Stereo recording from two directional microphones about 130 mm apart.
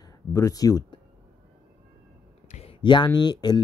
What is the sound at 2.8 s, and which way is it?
Speech, 35° left (ahead or behind).